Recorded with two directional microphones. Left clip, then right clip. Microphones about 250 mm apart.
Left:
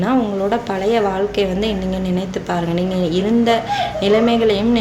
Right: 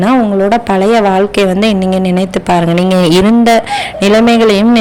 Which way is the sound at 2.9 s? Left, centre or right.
Right.